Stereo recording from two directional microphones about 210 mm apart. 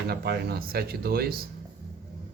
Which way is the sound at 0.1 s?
50° right (ahead or behind).